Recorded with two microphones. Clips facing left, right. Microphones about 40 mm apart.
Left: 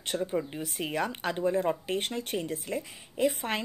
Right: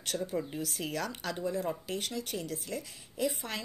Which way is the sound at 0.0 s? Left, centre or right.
Left.